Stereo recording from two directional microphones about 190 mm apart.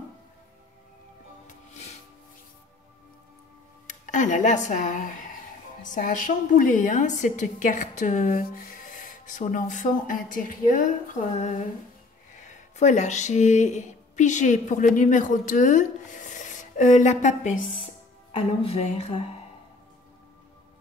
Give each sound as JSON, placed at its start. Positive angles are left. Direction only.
{"t": 1.7, "sound": "music", "side_deg": 35}
{"t": 3.8, "sound": "a woman's voice", "side_deg": 40}